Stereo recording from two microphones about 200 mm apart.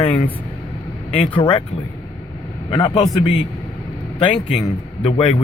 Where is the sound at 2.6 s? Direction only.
20° left (ahead or behind).